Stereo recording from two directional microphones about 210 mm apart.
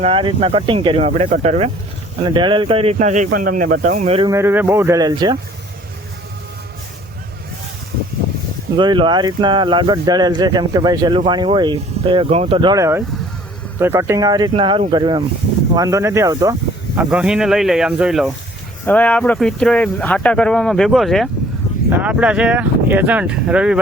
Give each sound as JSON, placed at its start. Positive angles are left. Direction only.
{"t": 0.0, "sound": "speech", "side_deg": -25}
{"t": 4.3, "sound": "speech", "side_deg": -10}
{"t": 8.7, "sound": "speech", "side_deg": -20}
{"t": 17.0, "sound": "speech", "side_deg": -5}